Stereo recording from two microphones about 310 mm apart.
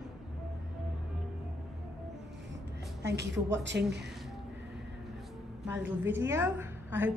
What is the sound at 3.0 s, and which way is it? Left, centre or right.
Speech, right.